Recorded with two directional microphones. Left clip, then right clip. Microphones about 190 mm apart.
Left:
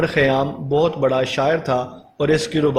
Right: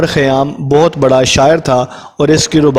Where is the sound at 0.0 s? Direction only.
55° right (ahead or behind).